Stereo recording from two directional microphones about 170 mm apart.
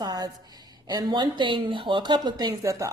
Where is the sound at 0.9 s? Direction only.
25° right (ahead or behind).